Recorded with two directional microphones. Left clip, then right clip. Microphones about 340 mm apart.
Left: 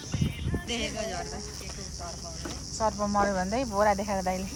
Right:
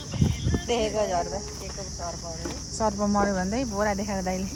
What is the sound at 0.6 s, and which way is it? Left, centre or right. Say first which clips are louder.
Speech: right 7 dB; right.